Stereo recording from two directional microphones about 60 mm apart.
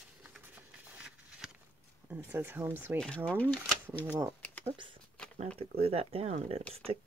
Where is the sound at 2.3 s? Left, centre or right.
Right.